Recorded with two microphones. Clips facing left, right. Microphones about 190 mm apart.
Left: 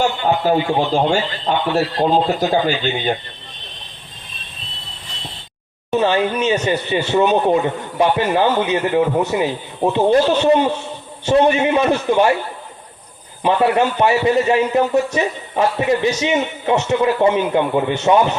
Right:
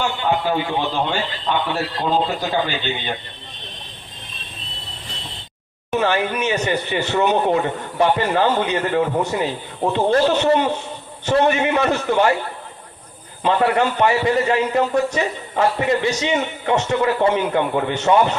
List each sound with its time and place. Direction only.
0.0 s a man's voice: 40° left (ahead or behind)
5.9 s a man's voice: 20° left (ahead or behind)
13.4 s a man's voice: 15° left (ahead or behind)